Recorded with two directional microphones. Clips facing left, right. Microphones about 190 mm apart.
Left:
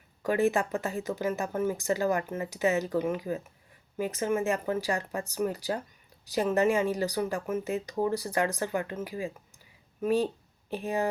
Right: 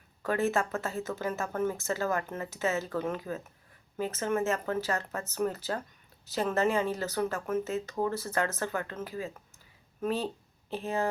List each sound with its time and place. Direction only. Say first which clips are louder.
0.2 s speech: left 3 dB; 15° left (ahead or behind)